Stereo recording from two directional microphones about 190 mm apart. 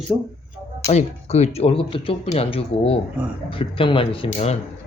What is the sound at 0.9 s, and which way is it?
Speech, 35° left (ahead or behind).